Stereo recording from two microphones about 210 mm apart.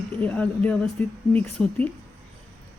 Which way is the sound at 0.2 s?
5° left (ahead or behind).